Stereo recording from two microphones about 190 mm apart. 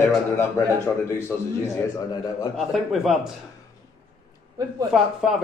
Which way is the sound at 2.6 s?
Centre (ahead or behind).